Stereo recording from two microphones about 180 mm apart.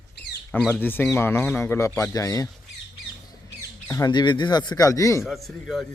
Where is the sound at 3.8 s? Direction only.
20° left (ahead or behind).